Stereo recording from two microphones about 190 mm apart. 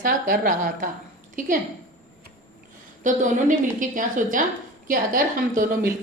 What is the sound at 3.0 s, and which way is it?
A woman's voice, 40° right (ahead or behind).